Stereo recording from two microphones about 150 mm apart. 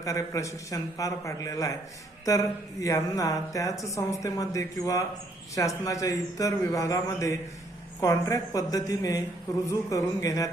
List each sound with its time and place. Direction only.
0.0 s speech: 20° left (ahead or behind)